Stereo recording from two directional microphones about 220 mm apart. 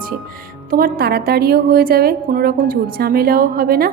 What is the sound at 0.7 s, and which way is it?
A woman's voice, 40° right (ahead or behind).